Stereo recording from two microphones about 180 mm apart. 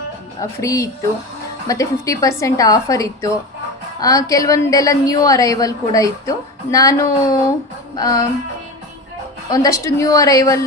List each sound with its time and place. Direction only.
0.6 s a woman's voice: 15° left (ahead or behind)
9.5 s a woman's voice: 15° left (ahead or behind)